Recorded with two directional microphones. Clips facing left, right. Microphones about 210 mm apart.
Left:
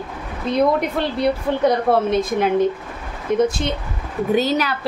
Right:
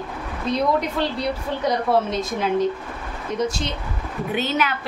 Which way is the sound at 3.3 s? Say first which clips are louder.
Left 6 dB; 55° left (ahead or behind).